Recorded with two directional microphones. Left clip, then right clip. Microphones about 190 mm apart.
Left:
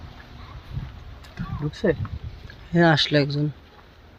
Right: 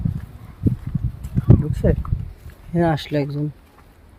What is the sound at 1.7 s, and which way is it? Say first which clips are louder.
Speech: right 1 dB; 65° right (ahead or behind).